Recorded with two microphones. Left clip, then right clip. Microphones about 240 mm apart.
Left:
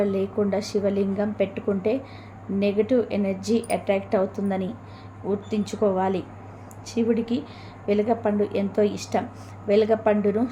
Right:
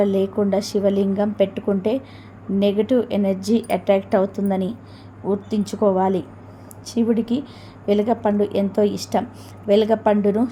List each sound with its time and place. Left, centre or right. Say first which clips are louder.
0.0 s a woman's voice: right 4 dB; right